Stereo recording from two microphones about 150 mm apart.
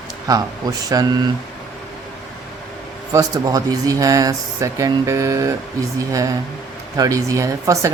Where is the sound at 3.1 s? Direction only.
25° right (ahead or behind).